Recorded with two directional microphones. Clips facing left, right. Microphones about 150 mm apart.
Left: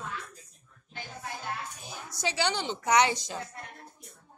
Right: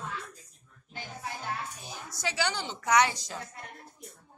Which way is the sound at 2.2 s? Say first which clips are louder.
Left 2 dB; 25° left (ahead or behind).